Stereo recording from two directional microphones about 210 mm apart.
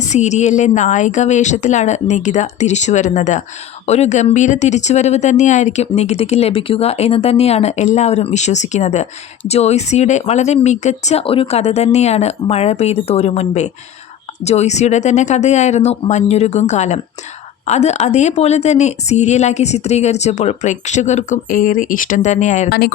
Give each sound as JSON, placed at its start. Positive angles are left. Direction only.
{"t": 0.0, "sound": "speech", "side_deg": 35}